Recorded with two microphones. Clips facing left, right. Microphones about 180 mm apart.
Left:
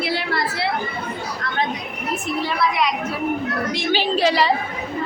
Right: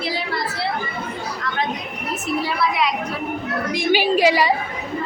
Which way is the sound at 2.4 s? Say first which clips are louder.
Left 1 dB; centre (ahead or behind).